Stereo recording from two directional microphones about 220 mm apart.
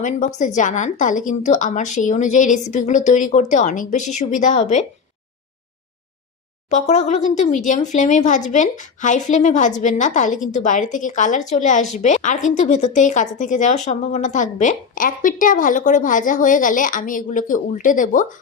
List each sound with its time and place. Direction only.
0.0 s a woman's voice: 30° left (ahead or behind)
6.7 s a woman's voice: 30° left (ahead or behind)